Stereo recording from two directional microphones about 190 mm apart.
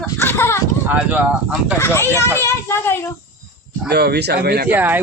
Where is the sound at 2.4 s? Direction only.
15° left (ahead or behind).